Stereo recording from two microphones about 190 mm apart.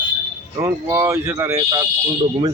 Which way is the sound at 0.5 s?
15° right (ahead or behind).